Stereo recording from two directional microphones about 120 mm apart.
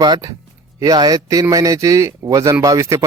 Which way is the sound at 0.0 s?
35° right (ahead or behind).